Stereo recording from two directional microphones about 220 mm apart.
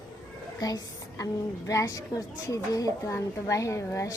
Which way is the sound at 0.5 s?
15° left (ahead or behind).